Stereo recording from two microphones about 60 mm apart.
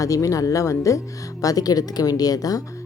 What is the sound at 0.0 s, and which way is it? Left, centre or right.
Speech, left.